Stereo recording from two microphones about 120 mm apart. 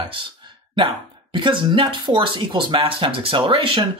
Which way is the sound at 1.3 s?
45° right (ahead or behind).